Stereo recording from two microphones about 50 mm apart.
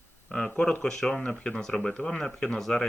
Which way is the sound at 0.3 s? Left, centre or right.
Centre.